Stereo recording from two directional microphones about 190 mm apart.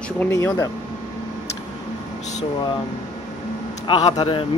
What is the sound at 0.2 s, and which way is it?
Speech, 15° left (ahead or behind).